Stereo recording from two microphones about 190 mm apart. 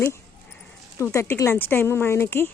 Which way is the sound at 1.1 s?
15° left (ahead or behind).